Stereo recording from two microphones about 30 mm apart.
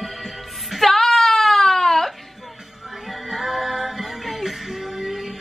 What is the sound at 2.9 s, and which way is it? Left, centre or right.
Music, centre.